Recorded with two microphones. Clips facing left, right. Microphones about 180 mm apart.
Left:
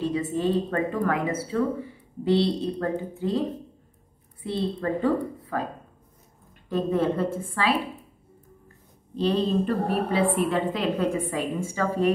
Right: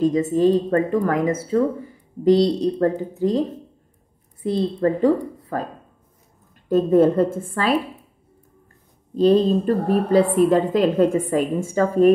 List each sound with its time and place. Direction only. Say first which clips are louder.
0.0 s a woman's voice: right 8 dB; 40° right (ahead or behind)
6.7 s a woman's voice: right 9 dB; 45° right (ahead or behind)
9.1 s a woman's voice: right 8 dB; 40° right (ahead or behind)